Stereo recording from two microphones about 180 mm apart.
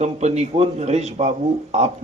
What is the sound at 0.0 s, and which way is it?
Speech, 40° right (ahead or behind).